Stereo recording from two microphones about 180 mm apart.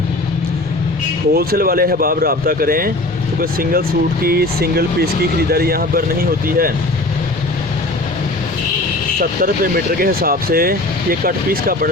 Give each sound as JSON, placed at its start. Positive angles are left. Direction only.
{"t": 1.3, "sound": "speech", "side_deg": -55}
{"t": 9.4, "sound": "speech", "side_deg": -55}